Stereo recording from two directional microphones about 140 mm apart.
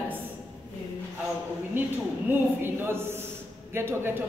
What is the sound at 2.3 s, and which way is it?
A man's voice, 15° right (ahead or behind).